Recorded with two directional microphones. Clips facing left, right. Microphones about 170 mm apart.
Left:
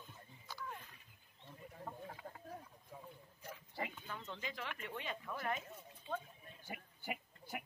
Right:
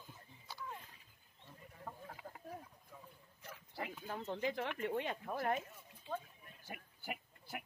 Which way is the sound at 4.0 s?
45° right (ahead or behind).